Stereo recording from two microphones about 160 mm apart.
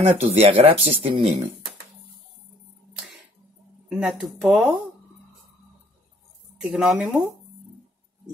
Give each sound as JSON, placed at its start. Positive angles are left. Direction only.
{"t": 0.0, "sound": "speech", "side_deg": -40}
{"t": 3.9, "sound": "speech", "side_deg": 0}
{"t": 6.6, "sound": "speech", "side_deg": -5}